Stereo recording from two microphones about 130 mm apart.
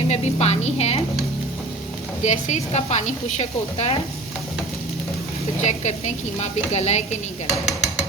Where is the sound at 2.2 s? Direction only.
65° left (ahead or behind).